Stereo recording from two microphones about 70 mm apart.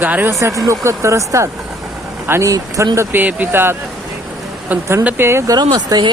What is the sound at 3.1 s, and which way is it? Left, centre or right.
Speech, right.